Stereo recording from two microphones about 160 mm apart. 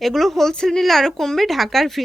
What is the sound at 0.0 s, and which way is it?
Speech, centre (ahead or behind).